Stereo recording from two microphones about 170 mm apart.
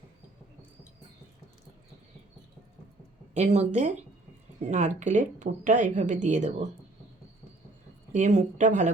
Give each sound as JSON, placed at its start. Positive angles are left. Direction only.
{"t": 3.3, "sound": "speech", "side_deg": -40}
{"t": 8.1, "sound": "speech", "side_deg": -45}